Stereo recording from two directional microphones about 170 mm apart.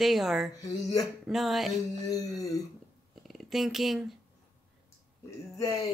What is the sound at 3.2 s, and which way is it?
Speech, centre (ahead or behind).